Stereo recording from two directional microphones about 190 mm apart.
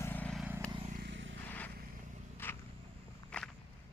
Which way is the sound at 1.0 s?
75° right (ahead or behind).